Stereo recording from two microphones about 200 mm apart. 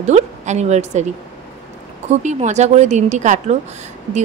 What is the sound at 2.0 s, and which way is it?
A woman's voice, 35° right (ahead or behind).